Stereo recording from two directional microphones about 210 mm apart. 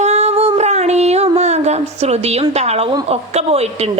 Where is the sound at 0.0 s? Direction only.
30° right (ahead or behind).